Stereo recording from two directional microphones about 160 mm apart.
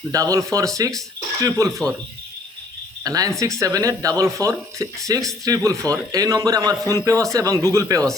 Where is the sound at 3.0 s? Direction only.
20° right (ahead or behind).